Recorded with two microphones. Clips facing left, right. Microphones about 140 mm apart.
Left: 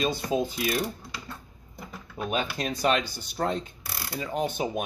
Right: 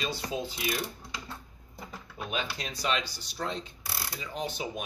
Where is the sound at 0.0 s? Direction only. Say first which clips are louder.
Left 7 dB; 50° left (ahead or behind).